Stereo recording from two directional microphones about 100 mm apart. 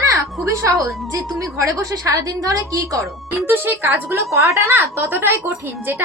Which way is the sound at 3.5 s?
20° right (ahead or behind).